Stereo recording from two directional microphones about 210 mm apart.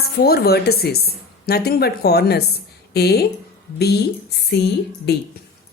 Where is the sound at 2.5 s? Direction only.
50° left (ahead or behind).